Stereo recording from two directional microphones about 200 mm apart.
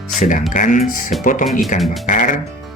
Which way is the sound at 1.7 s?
Centre (ahead or behind).